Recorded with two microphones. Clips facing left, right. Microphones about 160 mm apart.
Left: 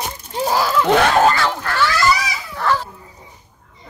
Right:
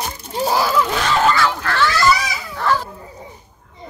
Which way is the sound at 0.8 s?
60° left (ahead or behind).